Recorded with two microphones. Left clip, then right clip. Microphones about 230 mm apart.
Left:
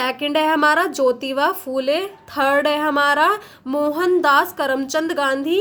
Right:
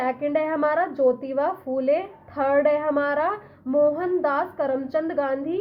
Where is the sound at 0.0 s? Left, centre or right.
Left.